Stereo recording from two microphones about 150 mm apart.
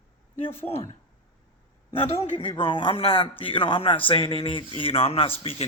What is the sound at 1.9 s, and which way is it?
A man's voice, 35° left (ahead or behind).